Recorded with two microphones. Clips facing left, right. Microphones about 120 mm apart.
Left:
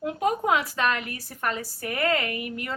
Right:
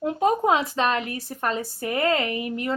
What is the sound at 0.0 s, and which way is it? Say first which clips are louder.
A woman's voice: right 4 dB; 30° right (ahead or behind).